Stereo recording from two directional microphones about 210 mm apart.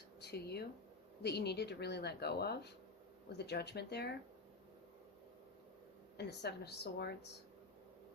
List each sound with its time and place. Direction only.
0.2 s a woman's voice: 50° left (ahead or behind)
6.1 s a woman's voice: 50° left (ahead or behind)